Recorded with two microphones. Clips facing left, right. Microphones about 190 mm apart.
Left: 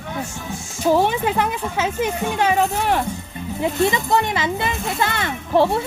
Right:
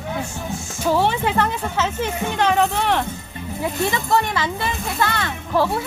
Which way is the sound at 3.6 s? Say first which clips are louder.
Left 4 dB; 20° left (ahead or behind).